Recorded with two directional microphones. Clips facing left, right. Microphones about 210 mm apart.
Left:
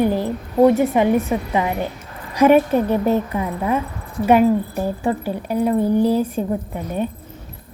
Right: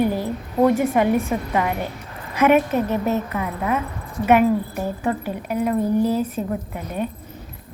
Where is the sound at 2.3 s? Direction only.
35° left (ahead or behind).